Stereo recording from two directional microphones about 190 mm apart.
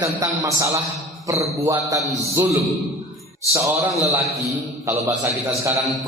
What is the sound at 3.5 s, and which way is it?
Speech, 15° right (ahead or behind).